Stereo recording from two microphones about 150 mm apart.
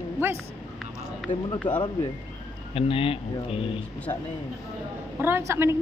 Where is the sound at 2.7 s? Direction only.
40° left (ahead or behind).